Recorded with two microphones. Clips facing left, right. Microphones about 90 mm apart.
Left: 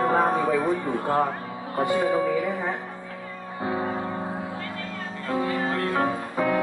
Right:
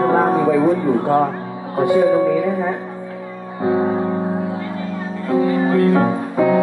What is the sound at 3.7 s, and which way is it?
Music, 20° right (ahead or behind).